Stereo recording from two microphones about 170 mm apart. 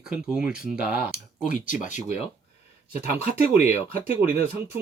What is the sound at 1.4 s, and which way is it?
Speech, 50° left (ahead or behind).